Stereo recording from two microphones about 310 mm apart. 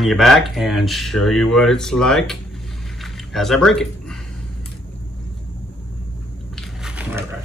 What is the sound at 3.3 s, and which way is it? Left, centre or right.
Speech, centre.